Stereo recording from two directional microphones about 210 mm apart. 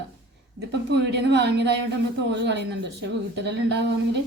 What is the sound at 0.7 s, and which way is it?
A woman's voice, 55° right (ahead or behind).